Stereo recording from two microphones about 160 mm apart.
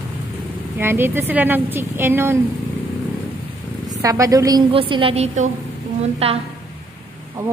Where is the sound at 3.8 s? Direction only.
20° right (ahead or behind).